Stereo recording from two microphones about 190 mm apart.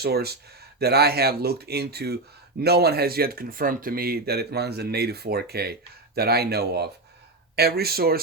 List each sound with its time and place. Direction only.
0.0 s speech: 55° right (ahead or behind)